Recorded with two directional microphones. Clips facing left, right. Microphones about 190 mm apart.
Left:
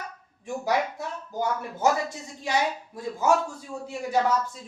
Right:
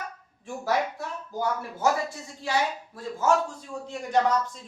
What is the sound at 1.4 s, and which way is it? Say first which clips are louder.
A man's voice: left 1 dB; 20° left (ahead or behind).